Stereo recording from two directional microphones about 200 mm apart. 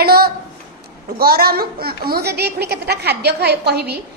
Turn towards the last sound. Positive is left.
turn(degrees=-55)  # may be behind; listen again after turning